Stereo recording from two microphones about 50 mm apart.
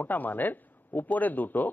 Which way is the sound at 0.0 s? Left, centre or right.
Left.